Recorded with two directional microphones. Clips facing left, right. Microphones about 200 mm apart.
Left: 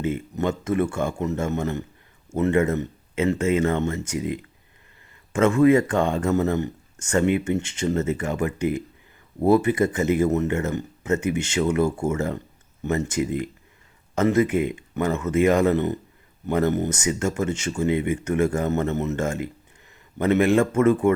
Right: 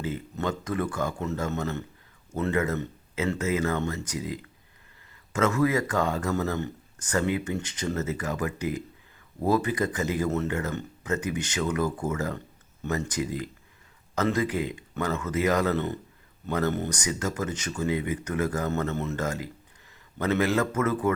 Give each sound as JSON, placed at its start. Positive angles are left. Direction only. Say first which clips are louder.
{"t": 0.0, "sound": "speech", "louder": "left 6 dB", "side_deg": 25}